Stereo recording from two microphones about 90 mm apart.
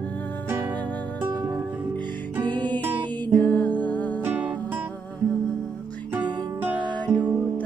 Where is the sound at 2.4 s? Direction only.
55° right (ahead or behind).